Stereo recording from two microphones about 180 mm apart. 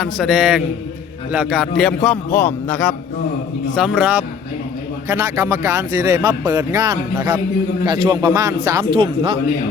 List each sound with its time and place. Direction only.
0.0 s a man's voice: centre (ahead or behind)
3.8 s a man's voice: 5° right (ahead or behind); by 8.9 s 20° right (ahead or behind)